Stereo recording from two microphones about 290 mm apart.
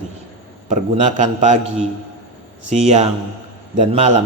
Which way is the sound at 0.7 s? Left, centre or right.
Right.